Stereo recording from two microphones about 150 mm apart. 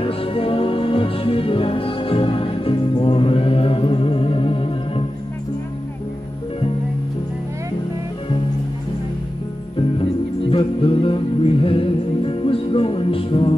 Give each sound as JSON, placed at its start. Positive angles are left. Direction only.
{"t": 0.0, "sound": "music", "side_deg": 40}
{"t": 10.5, "sound": "music", "side_deg": 35}